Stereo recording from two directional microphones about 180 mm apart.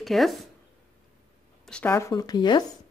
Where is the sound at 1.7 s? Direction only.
10° left (ahead or behind).